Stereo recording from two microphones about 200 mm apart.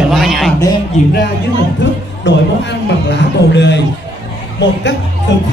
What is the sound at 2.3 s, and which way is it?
Speech, 65° left (ahead or behind).